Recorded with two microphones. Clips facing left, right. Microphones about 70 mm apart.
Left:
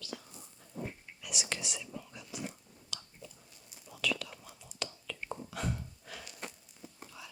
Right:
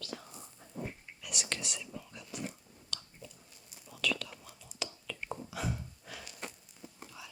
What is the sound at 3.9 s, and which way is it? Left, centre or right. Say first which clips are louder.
Whispering: even; centre.